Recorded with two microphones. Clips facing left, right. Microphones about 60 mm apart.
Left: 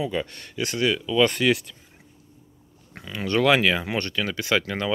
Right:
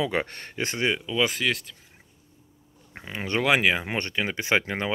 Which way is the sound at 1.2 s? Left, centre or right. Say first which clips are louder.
Left 7 dB; centre.